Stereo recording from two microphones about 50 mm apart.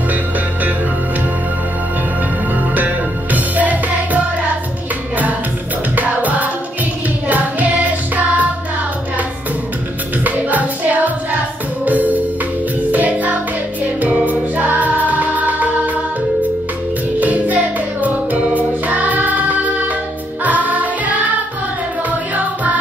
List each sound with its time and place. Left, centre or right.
2.7 s music: right
5.9 s music: right
10.2 s music: right
17.2 s music: right